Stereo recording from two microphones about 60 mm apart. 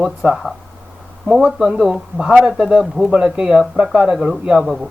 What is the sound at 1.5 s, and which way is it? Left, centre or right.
Speech, centre.